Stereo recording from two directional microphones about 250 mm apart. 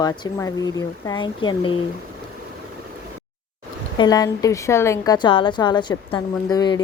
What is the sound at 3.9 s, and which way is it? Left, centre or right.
A woman's voice, centre.